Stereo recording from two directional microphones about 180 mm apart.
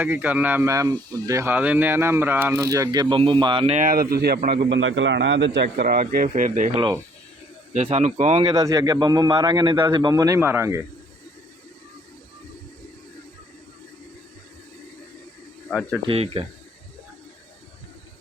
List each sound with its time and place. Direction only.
0.0 s speech: 10° right (ahead or behind); by 3.8 s 30° right (ahead or behind)
3.8 s a man's voice: 50° right (ahead or behind)
7.9 s speech: 40° right (ahead or behind)
8.4 s speech: 20° right (ahead or behind)
16.0 s speech: 35° right (ahead or behind)